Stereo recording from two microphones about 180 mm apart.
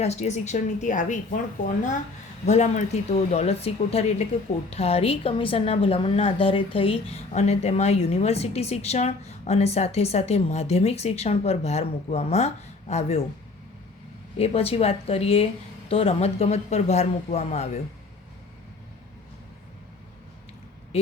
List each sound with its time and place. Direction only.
0.0 s a woman's voice: 35° left (ahead or behind)
2.5 s a woman's voice: 40° left (ahead or behind)
14.3 s a woman's voice: 35° left (ahead or behind)
20.9 s speech: 35° left (ahead or behind)